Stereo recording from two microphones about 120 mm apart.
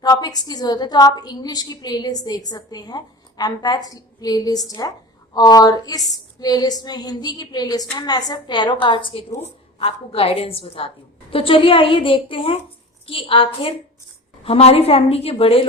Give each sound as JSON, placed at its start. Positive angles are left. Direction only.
{"t": 0.0, "sound": "a woman's voice", "side_deg": 35}